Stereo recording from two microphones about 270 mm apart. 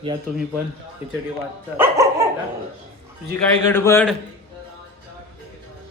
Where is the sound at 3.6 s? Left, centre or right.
Centre.